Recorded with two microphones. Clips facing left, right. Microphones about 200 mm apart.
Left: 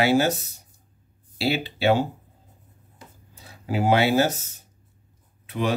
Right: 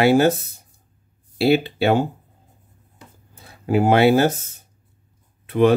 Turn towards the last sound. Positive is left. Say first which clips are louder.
# right 10 dB
turn(degrees=-55)  # may be behind; listen again after turning